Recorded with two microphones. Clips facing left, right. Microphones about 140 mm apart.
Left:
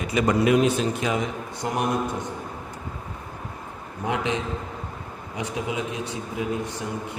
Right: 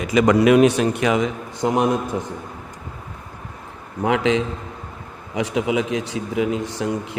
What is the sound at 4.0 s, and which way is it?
Speech, 90° right.